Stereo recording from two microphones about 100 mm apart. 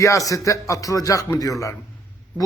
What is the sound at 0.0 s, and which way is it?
A man's voice, 35° left (ahead or behind).